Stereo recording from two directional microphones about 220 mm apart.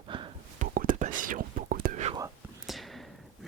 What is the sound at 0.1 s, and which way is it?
Whispering, 25° right (ahead or behind).